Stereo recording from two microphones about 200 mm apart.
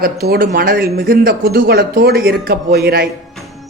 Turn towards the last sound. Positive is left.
turn(degrees=-55)  # may be behind; listen again after turning